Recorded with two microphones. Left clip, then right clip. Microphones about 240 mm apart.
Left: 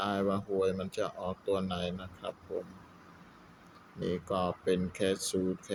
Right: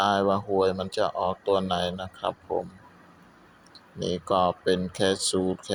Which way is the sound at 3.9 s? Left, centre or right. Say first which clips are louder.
Right 9 dB; centre.